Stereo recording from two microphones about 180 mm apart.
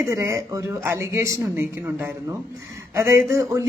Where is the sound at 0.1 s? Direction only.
15° right (ahead or behind).